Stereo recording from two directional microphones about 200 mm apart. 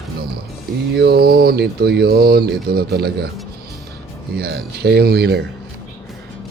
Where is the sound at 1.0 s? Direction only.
50° right (ahead or behind).